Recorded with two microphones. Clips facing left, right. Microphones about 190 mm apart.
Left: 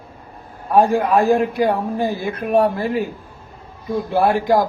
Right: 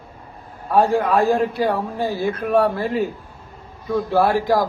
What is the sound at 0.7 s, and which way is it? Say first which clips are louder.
Speech: left 2 dB; 15° left (ahead or behind).